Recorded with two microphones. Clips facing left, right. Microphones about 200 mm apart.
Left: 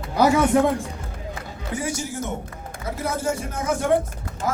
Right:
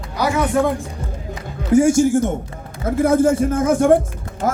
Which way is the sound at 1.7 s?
45° right (ahead or behind).